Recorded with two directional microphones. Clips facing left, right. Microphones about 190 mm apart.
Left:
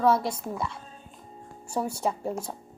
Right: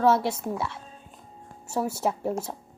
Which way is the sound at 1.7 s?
5° right (ahead or behind).